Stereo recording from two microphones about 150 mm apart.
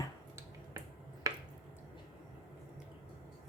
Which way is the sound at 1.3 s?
20° right (ahead or behind).